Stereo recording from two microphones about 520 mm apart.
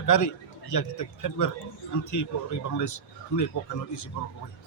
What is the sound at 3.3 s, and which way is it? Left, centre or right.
Speech, left.